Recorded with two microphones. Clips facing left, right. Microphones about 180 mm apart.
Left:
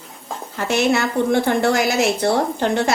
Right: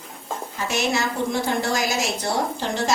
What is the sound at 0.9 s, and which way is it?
A woman's voice, 60° left (ahead or behind).